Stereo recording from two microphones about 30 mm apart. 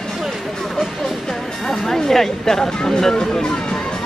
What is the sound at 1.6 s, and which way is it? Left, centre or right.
Speech, centre.